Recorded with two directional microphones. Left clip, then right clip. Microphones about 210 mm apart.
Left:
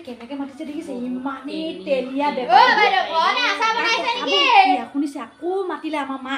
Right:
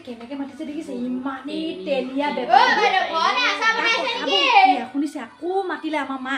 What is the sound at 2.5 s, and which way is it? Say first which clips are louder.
A child's voice: left 2 dB; 25° left (ahead or behind).